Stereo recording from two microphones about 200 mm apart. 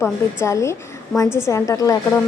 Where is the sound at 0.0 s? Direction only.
15° left (ahead or behind).